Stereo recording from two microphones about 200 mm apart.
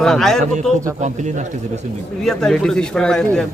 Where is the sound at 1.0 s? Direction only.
35° right (ahead or behind).